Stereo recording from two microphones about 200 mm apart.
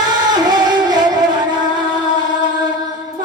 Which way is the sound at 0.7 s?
20° right (ahead or behind).